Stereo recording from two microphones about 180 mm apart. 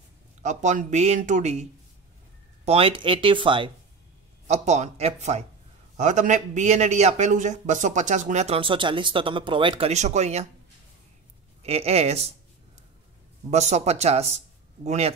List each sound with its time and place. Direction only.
0.4 s a man's voice: 40° right (ahead or behind)
4.5 s a man's voice: 40° right (ahead or behind)
11.6 s a man's voice: 35° right (ahead or behind)
13.5 s a man's voice: 40° right (ahead or behind)